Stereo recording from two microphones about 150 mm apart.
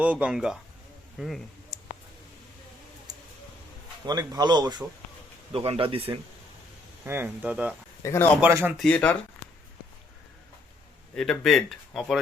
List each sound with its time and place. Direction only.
0.0 s speech: 10° right (ahead or behind)
1.7 s clicking: centre (ahead or behind)
4.0 s speech: 25° right (ahead or behind)
5.5 s speech: 40° right (ahead or behind)
7.0 s speech: 15° right (ahead or behind)
8.0 s speech: 20° left (ahead or behind)
8.4 s speech: 15° right (ahead or behind)
8.8 s speech: 10° left (ahead or behind)
11.1 s speech: 5° left (ahead or behind)